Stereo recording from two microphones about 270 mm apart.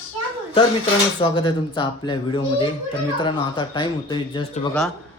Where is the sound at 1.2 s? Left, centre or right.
Centre.